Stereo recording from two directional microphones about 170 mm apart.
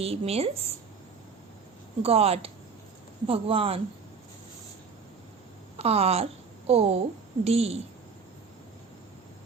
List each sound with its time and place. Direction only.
0.0 s speech: 35° right (ahead or behind)
2.0 s speech: 35° right (ahead or behind)
5.8 s speech: 35° right (ahead or behind)